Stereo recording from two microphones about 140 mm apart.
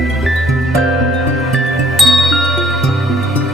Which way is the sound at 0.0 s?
Centre (ahead or behind).